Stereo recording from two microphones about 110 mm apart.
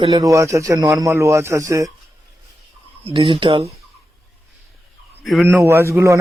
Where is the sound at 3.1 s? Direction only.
50° right (ahead or behind).